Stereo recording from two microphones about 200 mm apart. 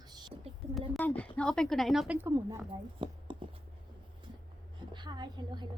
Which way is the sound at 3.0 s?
25° right (ahead or behind).